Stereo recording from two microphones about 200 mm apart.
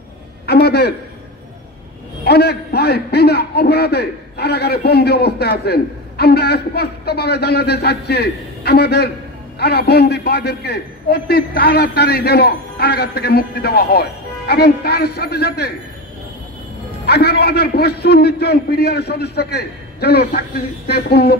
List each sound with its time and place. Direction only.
0.5 s a man's voice: 55° left (ahead or behind)
2.2 s a man's voice: 55° left (ahead or behind)
17.0 s a man's voice: 55° left (ahead or behind)